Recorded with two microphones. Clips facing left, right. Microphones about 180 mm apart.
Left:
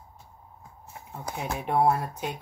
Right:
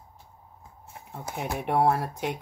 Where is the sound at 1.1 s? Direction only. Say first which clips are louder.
Right 1 dB; 60° right (ahead or behind).